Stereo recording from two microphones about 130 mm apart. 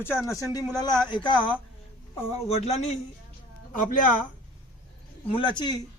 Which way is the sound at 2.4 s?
55° left (ahead or behind).